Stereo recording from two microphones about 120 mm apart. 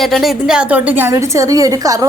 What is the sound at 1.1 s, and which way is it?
Speech, 30° right (ahead or behind).